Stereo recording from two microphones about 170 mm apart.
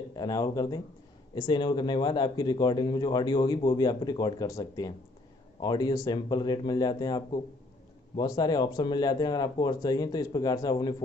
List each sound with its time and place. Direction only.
0.1 s speech: 25° left (ahead or behind)